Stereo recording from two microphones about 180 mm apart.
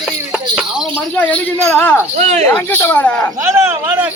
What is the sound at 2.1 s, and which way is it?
Speech, 40° right (ahead or behind).